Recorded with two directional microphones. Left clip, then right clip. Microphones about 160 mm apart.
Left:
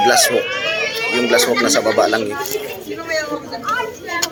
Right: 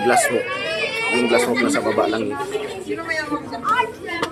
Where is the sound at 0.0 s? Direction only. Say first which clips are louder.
Left 4 dB; centre (ahead or behind).